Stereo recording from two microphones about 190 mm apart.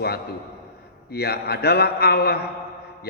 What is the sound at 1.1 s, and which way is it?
A man's voice, 55° left (ahead or behind).